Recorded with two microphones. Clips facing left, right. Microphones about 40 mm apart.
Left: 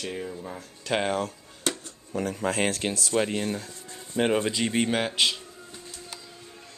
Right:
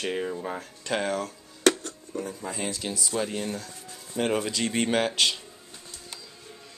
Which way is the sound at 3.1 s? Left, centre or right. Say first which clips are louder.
Left 4 dB; left.